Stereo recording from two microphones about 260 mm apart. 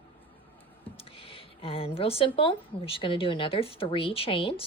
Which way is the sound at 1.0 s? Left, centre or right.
Left.